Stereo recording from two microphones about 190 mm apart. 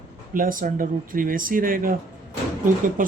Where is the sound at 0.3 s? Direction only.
45° right (ahead or behind).